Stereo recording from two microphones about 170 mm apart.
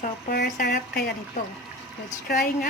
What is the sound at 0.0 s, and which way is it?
Speech, 60° left (ahead or behind).